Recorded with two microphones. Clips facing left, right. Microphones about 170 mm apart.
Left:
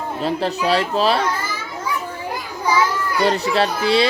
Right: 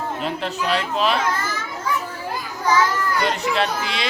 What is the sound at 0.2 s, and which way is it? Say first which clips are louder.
Speech: left 4 dB; 35° left (ahead or behind).